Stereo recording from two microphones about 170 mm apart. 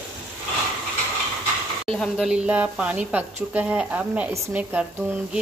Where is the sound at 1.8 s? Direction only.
5° left (ahead or behind).